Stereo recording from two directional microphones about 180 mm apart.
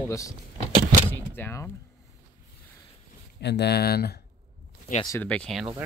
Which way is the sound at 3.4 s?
65° left (ahead or behind).